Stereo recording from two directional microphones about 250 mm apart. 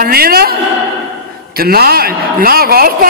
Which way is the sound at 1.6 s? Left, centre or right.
Right.